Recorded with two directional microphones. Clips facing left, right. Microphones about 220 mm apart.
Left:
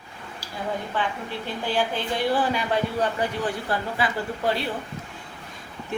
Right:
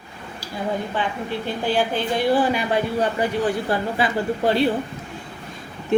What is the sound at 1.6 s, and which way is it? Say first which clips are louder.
Speech: right 4 dB; 15° right (ahead or behind).